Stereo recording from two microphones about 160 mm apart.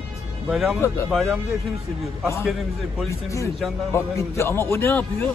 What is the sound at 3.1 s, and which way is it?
Speech, 20° left (ahead or behind).